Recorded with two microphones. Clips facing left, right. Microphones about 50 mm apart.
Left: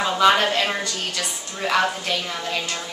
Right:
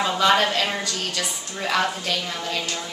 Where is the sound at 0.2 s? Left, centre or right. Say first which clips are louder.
Left 2 dB; centre.